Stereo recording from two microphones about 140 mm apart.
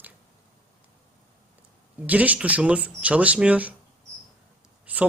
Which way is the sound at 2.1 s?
10° right (ahead or behind).